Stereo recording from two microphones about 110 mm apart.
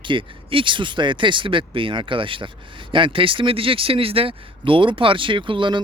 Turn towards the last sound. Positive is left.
turn(degrees=-50)  # may be behind; listen again after turning